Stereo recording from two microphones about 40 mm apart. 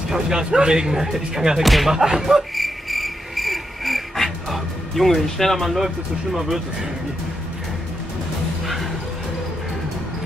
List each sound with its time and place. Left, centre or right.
0.1 s speech: centre
1.9 s speech: centre
2.5 s insect: centre
6.3 s speech: centre